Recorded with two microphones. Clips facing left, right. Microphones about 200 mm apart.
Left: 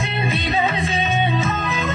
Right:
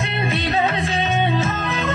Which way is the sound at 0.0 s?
Centre (ahead or behind).